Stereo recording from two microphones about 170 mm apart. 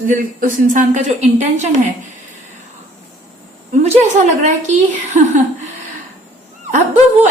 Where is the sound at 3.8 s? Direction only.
40° right (ahead or behind).